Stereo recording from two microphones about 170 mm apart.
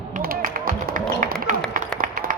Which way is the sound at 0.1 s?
55° right (ahead or behind).